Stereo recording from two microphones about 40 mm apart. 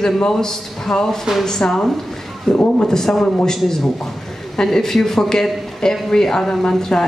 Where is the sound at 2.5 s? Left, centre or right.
Left.